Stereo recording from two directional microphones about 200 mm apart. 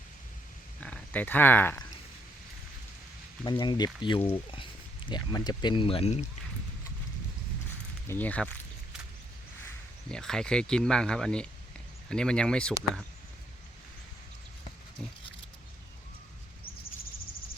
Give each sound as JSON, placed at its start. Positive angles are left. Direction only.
{"t": 0.8, "sound": "speech", "side_deg": 5}
{"t": 3.4, "sound": "speech", "side_deg": 25}
{"t": 8.0, "sound": "speech", "side_deg": 10}
{"t": 10.1, "sound": "speech", "side_deg": 5}